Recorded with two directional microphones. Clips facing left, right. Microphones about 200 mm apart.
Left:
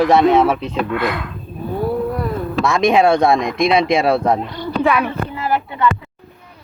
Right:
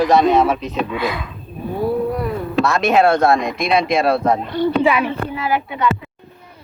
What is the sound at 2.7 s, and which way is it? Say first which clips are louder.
Speech: left 2 dB; 15° left (ahead or behind).